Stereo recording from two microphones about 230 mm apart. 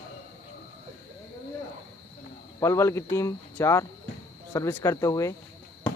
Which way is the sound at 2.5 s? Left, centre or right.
Centre.